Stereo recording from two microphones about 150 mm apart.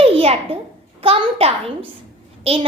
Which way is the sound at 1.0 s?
40° right (ahead or behind).